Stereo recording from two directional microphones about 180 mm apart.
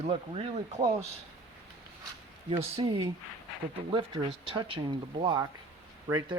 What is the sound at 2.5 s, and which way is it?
Speech, 25° right (ahead or behind).